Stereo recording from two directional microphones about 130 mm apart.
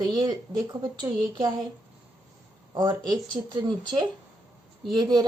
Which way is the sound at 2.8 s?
30° right (ahead or behind).